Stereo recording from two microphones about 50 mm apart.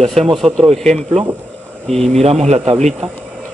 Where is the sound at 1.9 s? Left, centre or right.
Centre.